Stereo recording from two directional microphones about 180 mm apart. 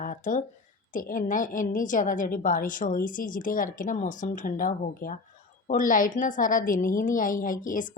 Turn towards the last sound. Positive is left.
turn(degrees=50)  # may be behind; listen again after turning